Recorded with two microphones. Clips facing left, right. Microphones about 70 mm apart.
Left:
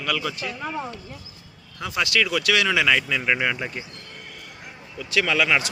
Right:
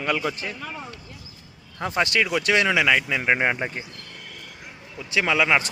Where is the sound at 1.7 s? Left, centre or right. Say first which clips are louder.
Right 1 dB; right.